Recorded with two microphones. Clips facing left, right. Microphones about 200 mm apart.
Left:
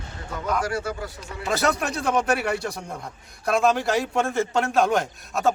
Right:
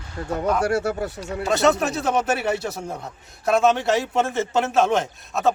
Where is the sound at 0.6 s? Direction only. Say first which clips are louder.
Right 6 dB; 70° right (ahead or behind).